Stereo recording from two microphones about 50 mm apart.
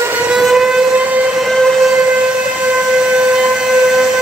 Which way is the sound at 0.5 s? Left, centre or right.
Centre.